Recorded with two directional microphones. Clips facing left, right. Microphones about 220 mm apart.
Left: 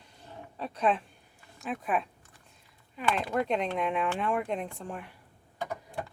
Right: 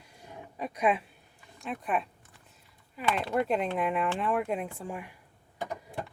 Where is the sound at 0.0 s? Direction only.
10° right (ahead or behind).